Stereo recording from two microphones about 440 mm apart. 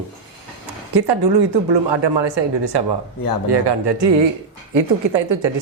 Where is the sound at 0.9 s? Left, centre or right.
Right.